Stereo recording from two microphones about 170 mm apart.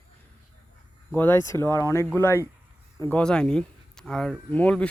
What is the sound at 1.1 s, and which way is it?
Speech, 10° left (ahead or behind).